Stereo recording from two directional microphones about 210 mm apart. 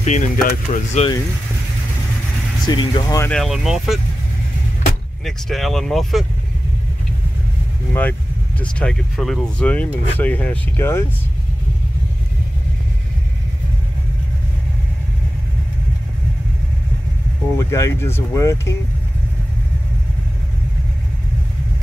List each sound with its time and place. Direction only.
0.0 s speech: 35° left (ahead or behind)
0.9 s speech: 25° left (ahead or behind)
2.6 s speech: 20° left (ahead or behind)
3.2 s speech: 5° left (ahead or behind)
5.2 s speech: centre (ahead or behind)
7.9 s speech: 10° left (ahead or behind)
17.6 s speech: 15° left (ahead or behind)